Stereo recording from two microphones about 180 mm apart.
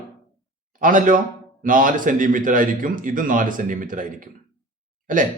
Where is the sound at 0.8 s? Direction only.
50° right (ahead or behind).